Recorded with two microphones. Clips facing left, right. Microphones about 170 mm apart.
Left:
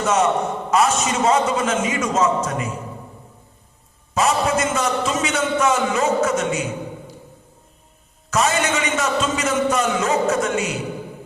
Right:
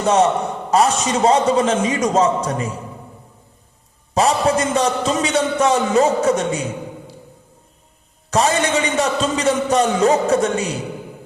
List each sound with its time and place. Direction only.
0.0 s a man's voice: 35° right (ahead or behind)
4.1 s a man's voice: 35° right (ahead or behind)
8.3 s a man's voice: 35° right (ahead or behind)